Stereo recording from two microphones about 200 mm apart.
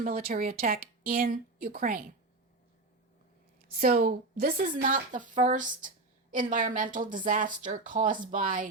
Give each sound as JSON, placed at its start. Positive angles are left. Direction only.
{"t": 0.0, "sound": "speech", "side_deg": -45}
{"t": 3.8, "sound": "speech", "side_deg": -45}